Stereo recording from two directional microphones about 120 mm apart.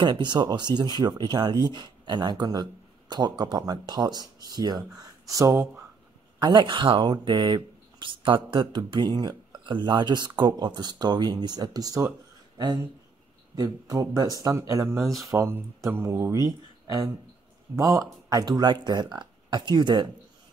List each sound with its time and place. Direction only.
0.0 s speech: 40° right (ahead or behind)
6.4 s speech: 40° right (ahead or behind)